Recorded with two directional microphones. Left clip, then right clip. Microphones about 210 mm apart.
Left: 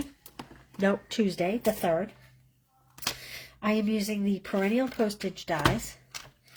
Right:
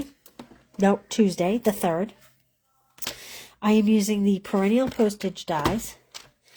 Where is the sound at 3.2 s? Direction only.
40° right (ahead or behind).